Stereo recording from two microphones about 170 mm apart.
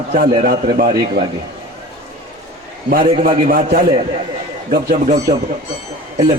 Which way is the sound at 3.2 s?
55° right (ahead or behind).